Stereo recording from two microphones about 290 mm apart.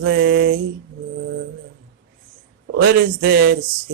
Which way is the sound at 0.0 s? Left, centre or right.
Right.